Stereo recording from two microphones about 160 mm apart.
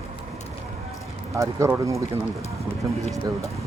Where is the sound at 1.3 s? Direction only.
20° right (ahead or behind).